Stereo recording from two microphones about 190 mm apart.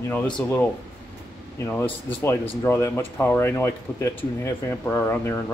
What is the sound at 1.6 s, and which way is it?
Speech, 10° left (ahead or behind).